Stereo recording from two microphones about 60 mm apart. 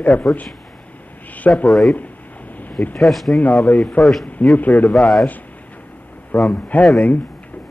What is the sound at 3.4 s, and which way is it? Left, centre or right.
Speech, left.